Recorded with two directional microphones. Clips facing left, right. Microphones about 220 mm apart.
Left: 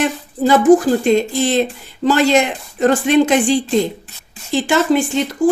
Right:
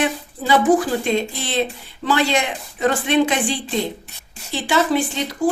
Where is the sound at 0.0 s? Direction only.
45° left (ahead or behind).